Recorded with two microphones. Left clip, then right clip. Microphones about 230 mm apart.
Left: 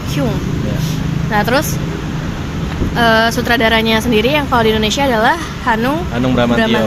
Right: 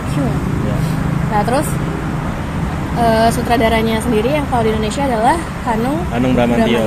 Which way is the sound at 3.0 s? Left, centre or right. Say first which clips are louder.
Left 1 dB; left.